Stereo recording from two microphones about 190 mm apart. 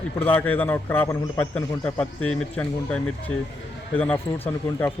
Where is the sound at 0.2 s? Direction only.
10° left (ahead or behind).